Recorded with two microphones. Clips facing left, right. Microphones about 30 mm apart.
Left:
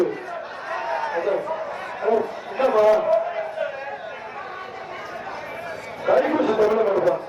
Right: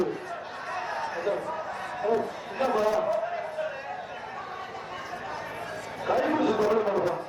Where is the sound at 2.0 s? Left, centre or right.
Left.